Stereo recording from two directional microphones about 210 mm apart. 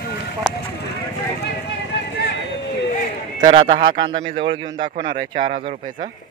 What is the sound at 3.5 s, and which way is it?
A man's voice, 25° right (ahead or behind).